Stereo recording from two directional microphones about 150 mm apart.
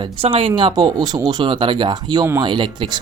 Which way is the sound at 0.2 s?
40° right (ahead or behind).